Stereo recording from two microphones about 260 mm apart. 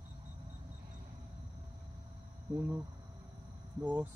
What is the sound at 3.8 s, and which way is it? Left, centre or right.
Speech, centre.